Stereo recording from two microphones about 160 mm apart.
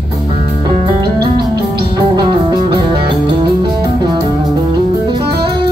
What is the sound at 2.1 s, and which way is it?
Music, 30° right (ahead or behind).